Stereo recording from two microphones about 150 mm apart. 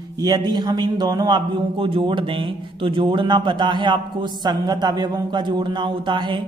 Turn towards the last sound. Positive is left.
turn(degrees=-30)  # may be behind; listen again after turning